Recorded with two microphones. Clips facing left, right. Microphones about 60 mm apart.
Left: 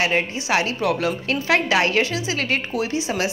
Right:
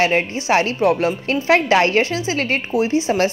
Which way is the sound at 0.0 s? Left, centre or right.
Right.